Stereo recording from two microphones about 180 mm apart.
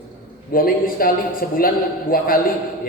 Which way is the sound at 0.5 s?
55° left (ahead or behind).